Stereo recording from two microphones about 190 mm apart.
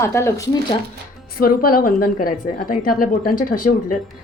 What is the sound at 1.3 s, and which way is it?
A woman's voice, 50° left (ahead or behind).